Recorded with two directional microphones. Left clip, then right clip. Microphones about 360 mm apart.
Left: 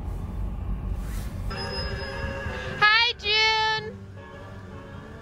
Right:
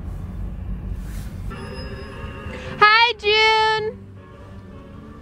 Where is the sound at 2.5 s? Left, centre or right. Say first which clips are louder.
Right 6 dB; centre.